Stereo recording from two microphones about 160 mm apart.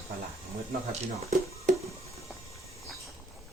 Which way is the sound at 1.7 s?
45° right (ahead or behind).